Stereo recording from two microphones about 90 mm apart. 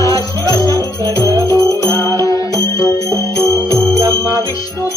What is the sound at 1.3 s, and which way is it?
Music, 35° right (ahead or behind).